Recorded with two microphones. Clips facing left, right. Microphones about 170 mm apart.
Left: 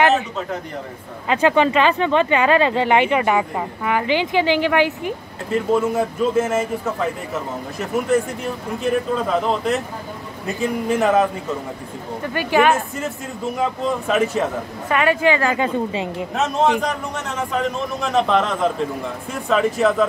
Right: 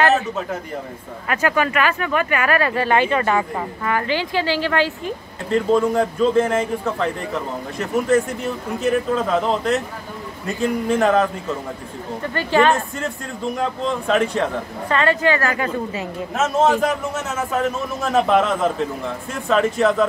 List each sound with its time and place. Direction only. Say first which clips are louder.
1.2 s a man's voice: left 4 dB; 20° left (ahead or behind); by 11.2 s centre (ahead or behind)
12.4 s a woman's voice: even; 15° left (ahead or behind)
12.7 s a man's voice: even; centre (ahead or behind); by 16.3 s 20° left (ahead or behind)
16.8 s a man's voice: right 3 dB; 5° right (ahead or behind)